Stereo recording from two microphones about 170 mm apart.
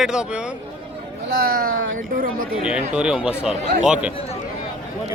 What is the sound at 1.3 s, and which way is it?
Speech, 60° right (ahead or behind).